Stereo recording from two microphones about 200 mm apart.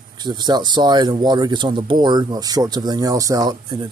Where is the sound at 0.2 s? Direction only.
20° right (ahead or behind).